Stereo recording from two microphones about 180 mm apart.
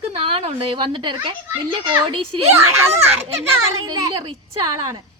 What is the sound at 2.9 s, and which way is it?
A child's voice, 35° right (ahead or behind).